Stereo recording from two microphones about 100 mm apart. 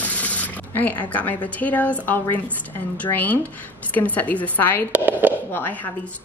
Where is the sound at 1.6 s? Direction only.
15° left (ahead or behind).